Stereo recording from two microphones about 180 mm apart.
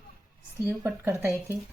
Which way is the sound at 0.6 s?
15° right (ahead or behind).